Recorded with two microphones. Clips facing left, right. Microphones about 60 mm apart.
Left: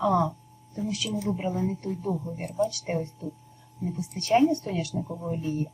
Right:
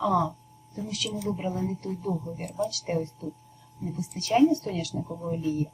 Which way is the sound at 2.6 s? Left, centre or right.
Left.